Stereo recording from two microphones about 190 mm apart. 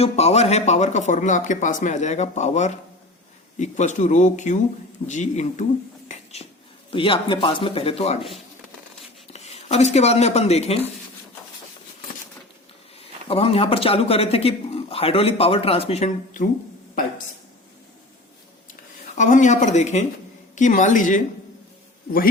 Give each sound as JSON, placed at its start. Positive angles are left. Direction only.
{"t": 0.0, "sound": "speech", "side_deg": 35}
{"t": 6.1, "sound": "whispering", "side_deg": 35}
{"t": 6.9, "sound": "speech", "side_deg": 25}
{"t": 9.2, "sound": "speech", "side_deg": 35}
{"t": 13.0, "sound": "speech", "side_deg": 30}
{"t": 18.7, "sound": "speech", "side_deg": 40}